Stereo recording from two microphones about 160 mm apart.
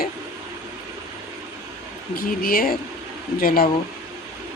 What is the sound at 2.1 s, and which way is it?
Speech, 65° left (ahead or behind).